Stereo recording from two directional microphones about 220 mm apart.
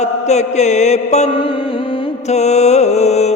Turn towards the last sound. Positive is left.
turn(degrees=30)  # may be behind; listen again after turning